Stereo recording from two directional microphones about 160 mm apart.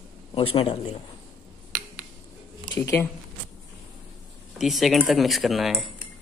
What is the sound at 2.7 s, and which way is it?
Speech, 15° left (ahead or behind).